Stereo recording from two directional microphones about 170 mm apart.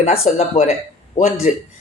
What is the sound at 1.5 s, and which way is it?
Speech, 45° left (ahead or behind).